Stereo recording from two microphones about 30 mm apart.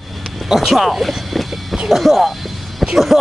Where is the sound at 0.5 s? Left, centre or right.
Centre.